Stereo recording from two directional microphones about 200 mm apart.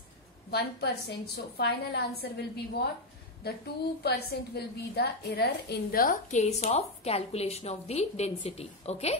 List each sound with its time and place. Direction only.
0.5 s a woman's voice: 55° left (ahead or behind); by 9.2 s 30° left (ahead or behind)